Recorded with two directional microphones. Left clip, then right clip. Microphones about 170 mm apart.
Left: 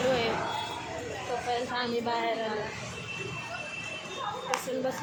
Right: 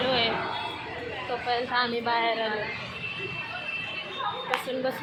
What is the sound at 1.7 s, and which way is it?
Speech, 10° left (ahead or behind).